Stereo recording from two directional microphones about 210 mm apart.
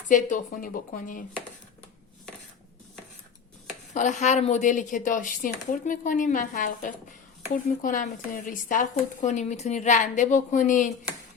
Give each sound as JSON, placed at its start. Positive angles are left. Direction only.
{"t": 0.1, "sound": "speech", "side_deg": 40}
{"t": 3.9, "sound": "speech", "side_deg": 35}